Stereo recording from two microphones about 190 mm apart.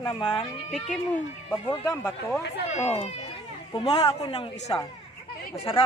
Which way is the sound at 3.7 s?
30° left (ahead or behind).